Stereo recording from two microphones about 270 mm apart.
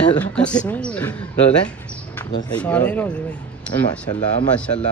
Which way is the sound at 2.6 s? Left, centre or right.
Centre.